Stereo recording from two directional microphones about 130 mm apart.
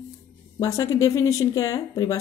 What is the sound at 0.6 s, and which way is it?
Speech, 25° left (ahead or behind).